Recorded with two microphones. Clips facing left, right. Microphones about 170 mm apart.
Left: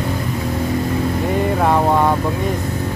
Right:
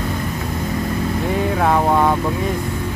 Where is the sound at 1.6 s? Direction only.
Centre (ahead or behind).